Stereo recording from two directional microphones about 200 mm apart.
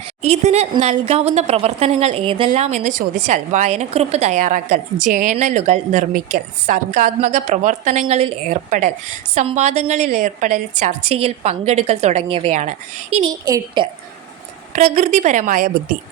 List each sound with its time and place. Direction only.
0.2 s a woman's voice: 30° right (ahead or behind)
13.4 s a woman's voice: 15° right (ahead or behind)
14.7 s a woman's voice: 35° right (ahead or behind)